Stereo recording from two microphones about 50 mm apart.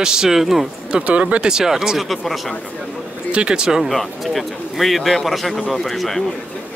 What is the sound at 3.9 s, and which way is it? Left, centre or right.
Speech, centre.